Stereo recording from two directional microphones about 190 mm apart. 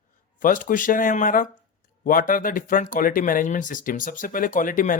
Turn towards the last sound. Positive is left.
turn(degrees=45)  # may be behind; listen again after turning